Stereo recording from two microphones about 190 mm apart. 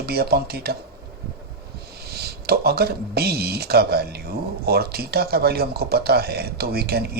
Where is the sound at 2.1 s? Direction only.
55° right (ahead or behind).